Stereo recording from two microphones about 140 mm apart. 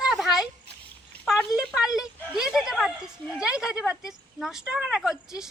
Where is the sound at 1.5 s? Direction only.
5° right (ahead or behind).